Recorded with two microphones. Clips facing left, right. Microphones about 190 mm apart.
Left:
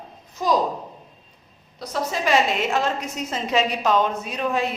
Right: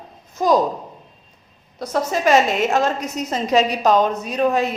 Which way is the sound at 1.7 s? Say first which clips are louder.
Right 5 dB; 50° right (ahead or behind).